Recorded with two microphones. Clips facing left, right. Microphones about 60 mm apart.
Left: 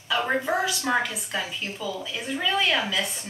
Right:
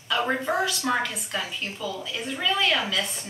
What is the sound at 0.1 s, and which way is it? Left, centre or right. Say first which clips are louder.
A woman's voice: even; centre.